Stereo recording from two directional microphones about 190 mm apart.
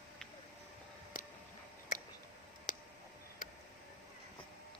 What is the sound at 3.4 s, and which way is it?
Tick, 45° left (ahead or behind).